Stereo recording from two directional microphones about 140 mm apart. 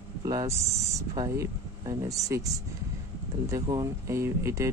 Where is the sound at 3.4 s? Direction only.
25° right (ahead or behind).